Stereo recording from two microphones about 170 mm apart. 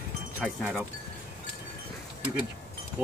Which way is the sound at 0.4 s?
5° right (ahead or behind).